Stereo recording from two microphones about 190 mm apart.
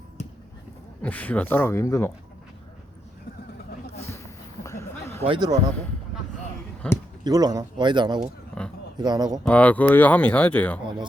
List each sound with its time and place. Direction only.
1.0 s speech: 10° left (ahead or behind)
4.6 s a sound: 15° left (ahead or behind)
5.2 s speech: 25° right (ahead or behind)
6.8 s speech: 5° left (ahead or behind)
7.3 s speech: 20° right (ahead or behind)
8.2 s a sound: 5° left (ahead or behind)
9.0 s speech: 20° right (ahead or behind)
9.4 s speech: 10° left (ahead or behind)